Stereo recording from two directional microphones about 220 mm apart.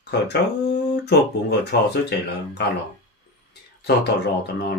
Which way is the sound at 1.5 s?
50° left (ahead or behind).